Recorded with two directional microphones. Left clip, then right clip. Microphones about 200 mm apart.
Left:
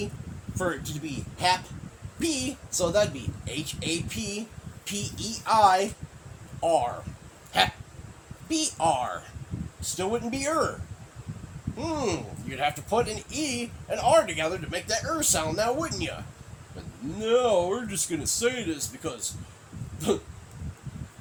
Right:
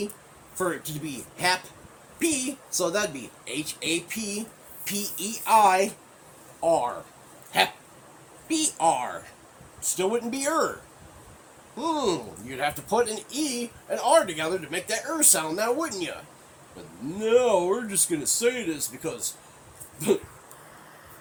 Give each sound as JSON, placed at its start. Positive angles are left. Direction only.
{"t": 0.6, "sound": "speech", "side_deg": 10}
{"t": 5.5, "sound": "speech", "side_deg": 15}
{"t": 11.8, "sound": "speech", "side_deg": 15}
{"t": 17.2, "sound": "speech", "side_deg": 15}